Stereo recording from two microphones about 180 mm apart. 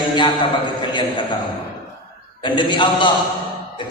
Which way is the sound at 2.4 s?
25° left (ahead or behind).